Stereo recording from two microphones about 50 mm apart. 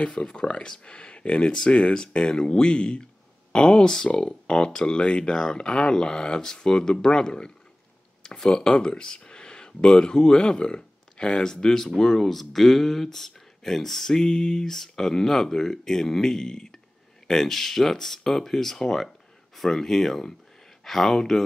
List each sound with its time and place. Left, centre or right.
0.0 s speech: centre